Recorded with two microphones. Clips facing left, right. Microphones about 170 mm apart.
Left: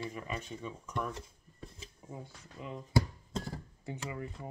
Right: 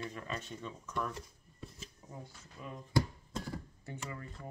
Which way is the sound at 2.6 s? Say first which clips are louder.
Left 3 dB; 20° left (ahead or behind).